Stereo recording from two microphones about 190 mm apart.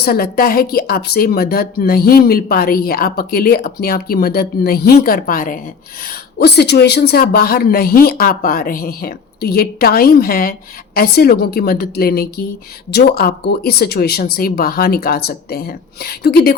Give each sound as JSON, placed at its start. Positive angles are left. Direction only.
{"t": 0.0, "sound": "a woman's voice", "side_deg": 55}
{"t": 6.1, "sound": "a woman's voice", "side_deg": 60}